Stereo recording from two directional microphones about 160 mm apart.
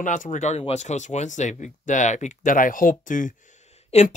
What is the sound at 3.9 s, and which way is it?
Speech, 45° left (ahead or behind).